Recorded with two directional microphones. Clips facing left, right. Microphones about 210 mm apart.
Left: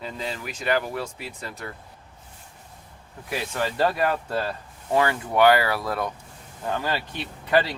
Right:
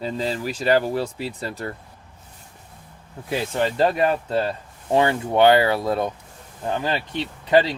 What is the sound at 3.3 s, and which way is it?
Speech, 25° right (ahead or behind).